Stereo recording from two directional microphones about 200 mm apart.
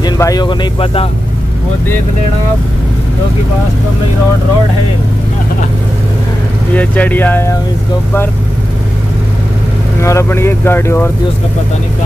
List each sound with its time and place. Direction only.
0.0 s speech: 20° left (ahead or behind)
6.7 s speech: 10° left (ahead or behind)
10.0 s speech: 15° left (ahead or behind)